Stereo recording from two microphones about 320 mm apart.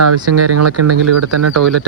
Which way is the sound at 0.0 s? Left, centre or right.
Right.